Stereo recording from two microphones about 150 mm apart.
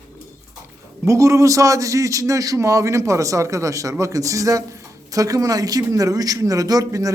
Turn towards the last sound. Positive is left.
turn(degrees=-25)  # may be behind; listen again after turning